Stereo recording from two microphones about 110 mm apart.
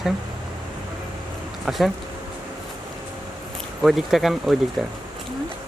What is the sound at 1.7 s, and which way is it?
Speech, 5° right (ahead or behind).